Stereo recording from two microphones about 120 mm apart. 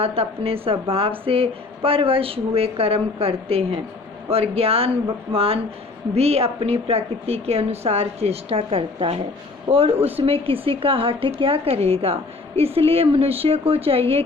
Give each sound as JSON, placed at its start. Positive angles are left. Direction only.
{"t": 0.0, "sound": "a woman's voice", "side_deg": -55}